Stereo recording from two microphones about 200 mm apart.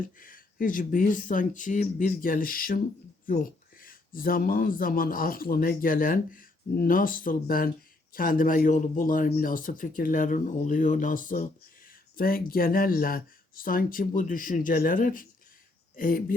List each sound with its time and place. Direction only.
0.2 s speech: 45° left (ahead or behind)